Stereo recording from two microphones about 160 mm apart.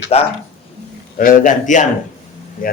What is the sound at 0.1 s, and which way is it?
Speech, 40° left (ahead or behind).